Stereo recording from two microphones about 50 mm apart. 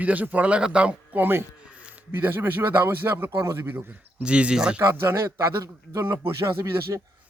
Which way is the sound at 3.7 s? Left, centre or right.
Right.